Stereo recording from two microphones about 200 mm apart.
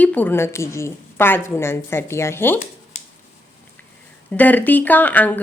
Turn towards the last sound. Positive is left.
turn(degrees=10)  # may be behind; listen again after turning